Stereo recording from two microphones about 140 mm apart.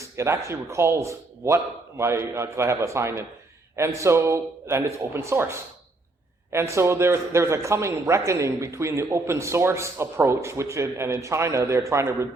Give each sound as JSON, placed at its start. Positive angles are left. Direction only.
{"t": 0.0, "sound": "speech", "side_deg": -20}